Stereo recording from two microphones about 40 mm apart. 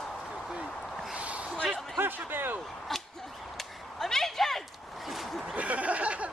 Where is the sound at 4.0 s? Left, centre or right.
Centre.